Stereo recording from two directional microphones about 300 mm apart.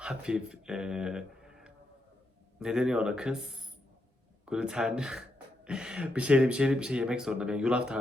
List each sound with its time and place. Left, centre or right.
0.0 s speech: centre